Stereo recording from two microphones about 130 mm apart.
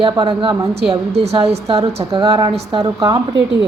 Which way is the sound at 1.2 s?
55° right (ahead or behind).